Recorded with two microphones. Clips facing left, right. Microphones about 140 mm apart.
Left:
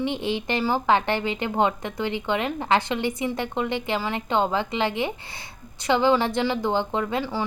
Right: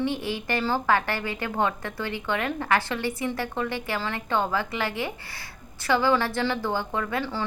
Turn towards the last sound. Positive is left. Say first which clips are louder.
# left 3 dB
turn(degrees=15)  # may be behind; listen again after turning